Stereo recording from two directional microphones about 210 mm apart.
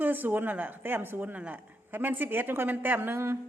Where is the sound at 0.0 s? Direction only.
10° right (ahead or behind).